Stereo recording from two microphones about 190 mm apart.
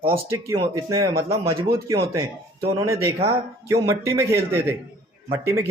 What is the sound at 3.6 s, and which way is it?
Speech, 15° right (ahead or behind).